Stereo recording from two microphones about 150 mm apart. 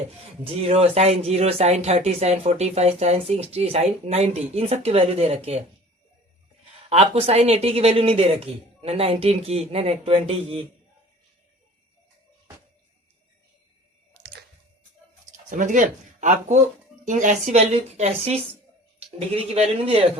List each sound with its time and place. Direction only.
0.5 s speech: 45° right (ahead or behind)
6.9 s speech: 40° right (ahead or behind)
14.1 s music: 90° right
15.4 s speech: 60° right (ahead or behind); by 20.1 s 40° right (ahead or behind)